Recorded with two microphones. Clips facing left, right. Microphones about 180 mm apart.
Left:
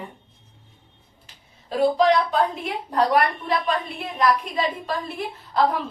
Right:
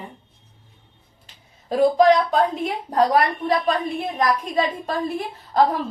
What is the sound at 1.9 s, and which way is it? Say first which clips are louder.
A woman's voice: right 4 dB; 45° right (ahead or behind).